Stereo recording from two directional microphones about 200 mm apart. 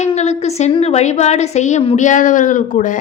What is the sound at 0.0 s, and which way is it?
A woman's voice, 35° left (ahead or behind).